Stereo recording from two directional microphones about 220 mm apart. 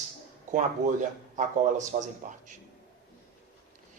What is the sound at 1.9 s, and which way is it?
Speech, 35° right (ahead or behind).